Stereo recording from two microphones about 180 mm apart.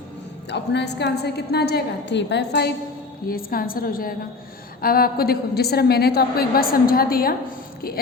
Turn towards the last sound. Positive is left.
turn(degrees=55)  # may be behind; listen again after turning